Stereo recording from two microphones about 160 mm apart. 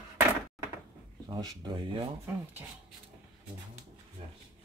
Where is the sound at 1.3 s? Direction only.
30° right (ahead or behind).